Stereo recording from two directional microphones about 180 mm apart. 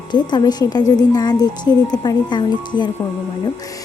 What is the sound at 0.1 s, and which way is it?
Speech, 25° left (ahead or behind).